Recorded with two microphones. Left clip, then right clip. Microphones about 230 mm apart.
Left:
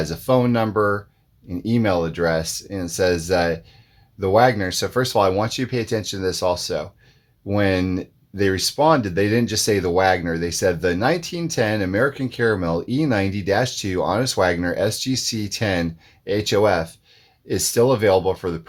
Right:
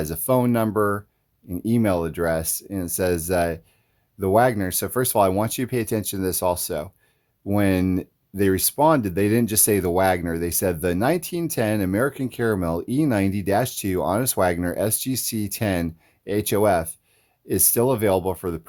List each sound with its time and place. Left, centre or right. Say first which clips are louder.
0.0 s speech: left 2 dB; right